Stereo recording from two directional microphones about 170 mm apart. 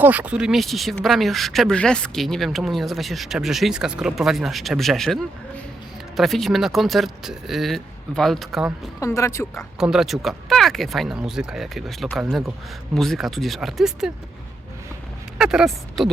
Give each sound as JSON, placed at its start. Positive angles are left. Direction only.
{"t": 0.0, "sound": "a woman's voice", "side_deg": -10}
{"t": 9.0, "sound": "speech", "side_deg": 15}
{"t": 9.7, "sound": "a woman's voice", "side_deg": -5}
{"t": 15.4, "sound": "a woman's voice", "side_deg": -5}